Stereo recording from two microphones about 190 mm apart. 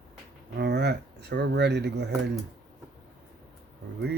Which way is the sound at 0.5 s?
60° right (ahead or behind).